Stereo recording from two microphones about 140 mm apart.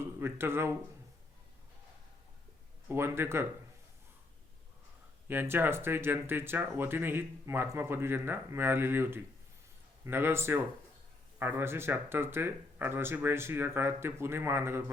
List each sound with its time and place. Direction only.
0.0 s speech: 15° right (ahead or behind)
2.9 s speech: 15° right (ahead or behind)
5.3 s speech: 15° right (ahead or behind)